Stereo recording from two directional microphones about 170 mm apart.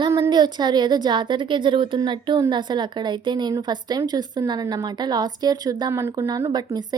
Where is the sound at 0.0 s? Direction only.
25° right (ahead or behind).